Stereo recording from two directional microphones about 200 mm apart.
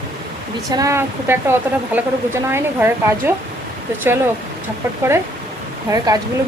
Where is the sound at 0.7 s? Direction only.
15° right (ahead or behind).